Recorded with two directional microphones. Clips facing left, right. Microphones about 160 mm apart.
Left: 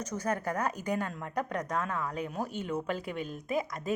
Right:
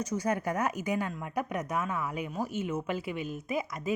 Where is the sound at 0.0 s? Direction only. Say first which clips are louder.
Right 2 dB; 10° right (ahead or behind).